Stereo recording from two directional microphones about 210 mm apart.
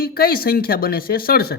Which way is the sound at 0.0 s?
45° left (ahead or behind).